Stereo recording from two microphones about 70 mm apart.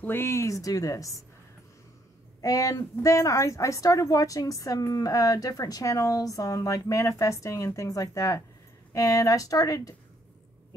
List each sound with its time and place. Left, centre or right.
0.0 s a woman's voice: left
2.4 s a woman's voice: left